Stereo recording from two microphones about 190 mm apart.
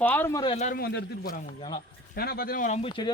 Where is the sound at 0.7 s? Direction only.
55° left (ahead or behind).